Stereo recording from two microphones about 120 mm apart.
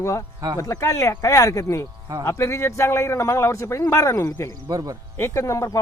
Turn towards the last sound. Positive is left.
turn(degrees=25)  # may be behind; listen again after turning